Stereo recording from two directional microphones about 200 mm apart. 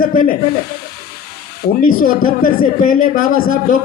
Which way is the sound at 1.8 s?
45° left (ahead or behind).